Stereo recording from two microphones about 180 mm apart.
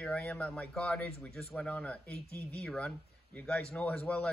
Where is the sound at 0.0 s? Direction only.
5° left (ahead or behind).